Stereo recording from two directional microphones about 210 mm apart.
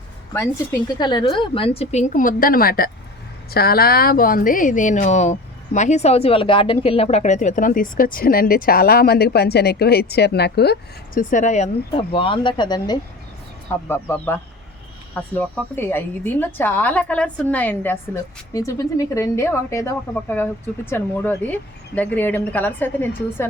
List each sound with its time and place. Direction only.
0.3 s a woman's voice: 15° left (ahead or behind)